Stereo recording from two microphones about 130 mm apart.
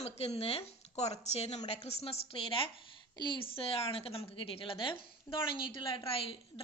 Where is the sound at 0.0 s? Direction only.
55° left (ahead or behind).